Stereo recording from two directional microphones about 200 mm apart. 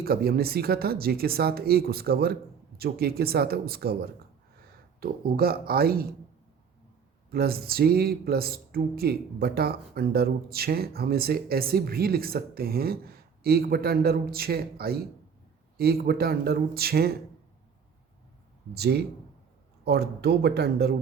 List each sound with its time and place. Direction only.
0.0 s speech: 50° right (ahead or behind)
7.3 s speech: 50° right (ahead or behind)
18.7 s speech: 55° right (ahead or behind)